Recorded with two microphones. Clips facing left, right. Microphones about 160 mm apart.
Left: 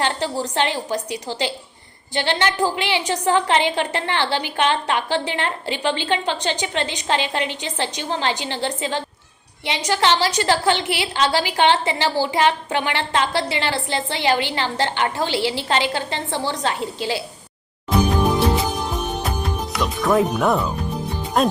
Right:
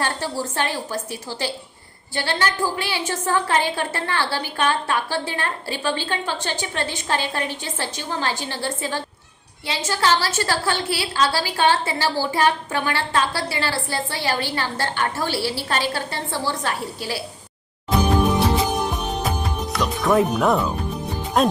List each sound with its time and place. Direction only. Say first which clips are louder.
0.0 s a woman's voice: left 3 dB; 15° left (ahead or behind)
19.4 s speech: even; centre (ahead or behind)